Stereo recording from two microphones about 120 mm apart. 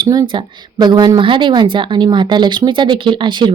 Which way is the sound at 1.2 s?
45° right (ahead or behind).